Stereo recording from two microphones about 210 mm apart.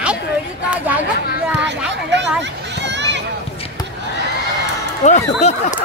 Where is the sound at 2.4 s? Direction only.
55° right (ahead or behind).